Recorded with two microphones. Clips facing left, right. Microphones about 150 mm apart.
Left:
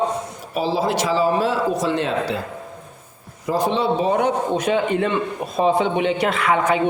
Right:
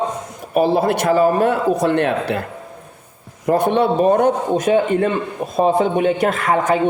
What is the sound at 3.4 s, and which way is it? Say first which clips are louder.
A man's voice: right 4 dB; 60° right (ahead or behind).